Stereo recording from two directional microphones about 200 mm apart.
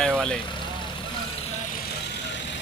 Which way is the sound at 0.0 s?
5° left (ahead or behind).